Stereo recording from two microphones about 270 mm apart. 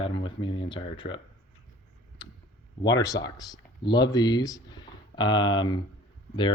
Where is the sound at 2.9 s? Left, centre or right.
Centre.